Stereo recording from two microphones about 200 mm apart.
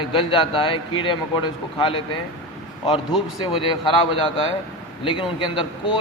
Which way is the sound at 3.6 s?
25° left (ahead or behind).